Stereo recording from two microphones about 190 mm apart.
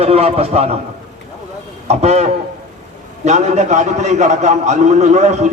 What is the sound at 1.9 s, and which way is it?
A man's voice, 35° right (ahead or behind).